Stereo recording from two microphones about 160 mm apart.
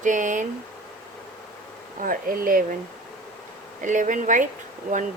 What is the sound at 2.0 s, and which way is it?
Speech, 60° right (ahead or behind).